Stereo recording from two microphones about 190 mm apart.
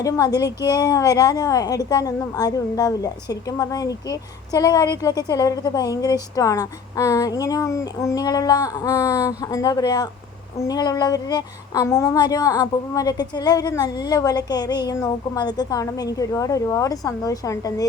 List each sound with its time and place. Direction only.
0.0 s a woman's voice: 20° left (ahead or behind)